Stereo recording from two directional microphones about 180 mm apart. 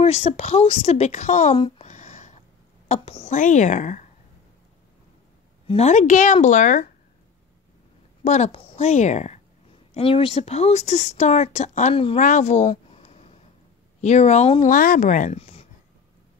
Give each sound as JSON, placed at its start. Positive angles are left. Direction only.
{"t": 0.0, "sound": "a woman's voice", "side_deg": 35}
{"t": 1.6, "sound": "a sound", "side_deg": 40}
{"t": 2.9, "sound": "a woman's voice", "side_deg": 35}
{"t": 5.7, "sound": "a woman's voice", "side_deg": 40}
{"t": 8.2, "sound": "a woman's voice", "side_deg": 40}
{"t": 12.2, "sound": "a sound", "side_deg": 45}
{"t": 14.0, "sound": "a woman's voice", "side_deg": 40}
{"t": 14.7, "sound": "speech", "side_deg": 50}